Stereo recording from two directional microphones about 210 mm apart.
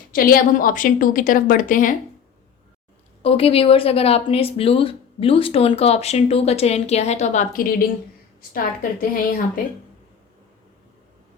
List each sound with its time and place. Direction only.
0.1 s a woman's voice: 45° left (ahead or behind)
3.2 s a woman's voice: 25° left (ahead or behind); by 9.0 s 45° left (ahead or behind)